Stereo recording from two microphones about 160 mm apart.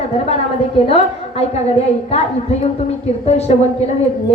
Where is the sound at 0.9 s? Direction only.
40° left (ahead or behind).